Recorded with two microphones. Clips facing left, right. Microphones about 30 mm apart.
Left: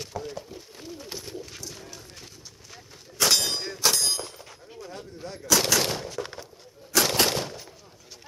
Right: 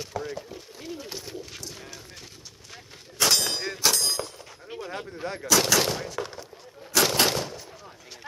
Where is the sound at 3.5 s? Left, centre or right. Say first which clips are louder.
Right 2 dB; centre.